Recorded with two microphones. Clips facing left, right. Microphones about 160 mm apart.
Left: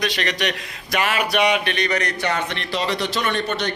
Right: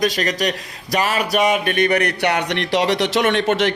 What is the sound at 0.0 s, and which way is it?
A man's voice, 40° right (ahead or behind).